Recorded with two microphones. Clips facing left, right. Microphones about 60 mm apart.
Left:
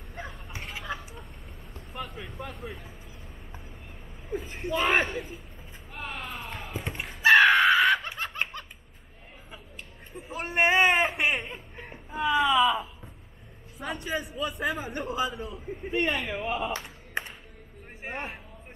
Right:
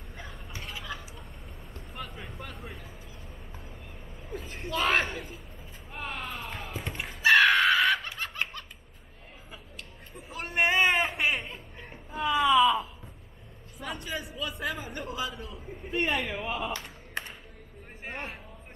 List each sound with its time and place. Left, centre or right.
1.7 s a sound: centre
4.3 s a woman's voice: centre
5.0 s speech: centre
5.9 s basketball bounce: centre
6.8 s a sound: centre
7.2 s screaming: centre
8.2 s giggle: centre
10.1 s a sound: centre
13.7 s a man's voice: centre
16.0 s speech: centre
17.2 s music: left
18.0 s a sound: centre